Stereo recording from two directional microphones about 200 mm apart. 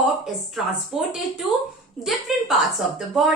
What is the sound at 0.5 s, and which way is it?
A woman's voice, centre (ahead or behind).